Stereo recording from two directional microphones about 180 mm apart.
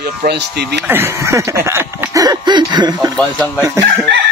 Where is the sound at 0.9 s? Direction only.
15° right (ahead or behind).